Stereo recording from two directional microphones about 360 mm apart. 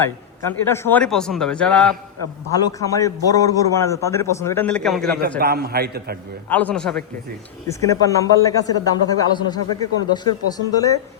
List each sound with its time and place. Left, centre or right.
0.0 s a man's voice: centre
5.4 s a man's voice: right
6.5 s a man's voice: centre